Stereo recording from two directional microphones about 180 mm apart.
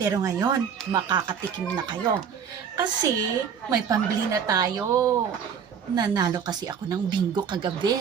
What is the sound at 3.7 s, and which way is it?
Speech, 20° right (ahead or behind).